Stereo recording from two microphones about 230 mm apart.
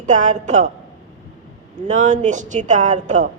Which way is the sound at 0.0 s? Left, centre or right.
Right.